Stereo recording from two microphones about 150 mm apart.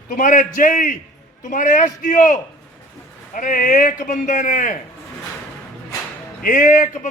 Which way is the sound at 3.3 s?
65° left (ahead or behind).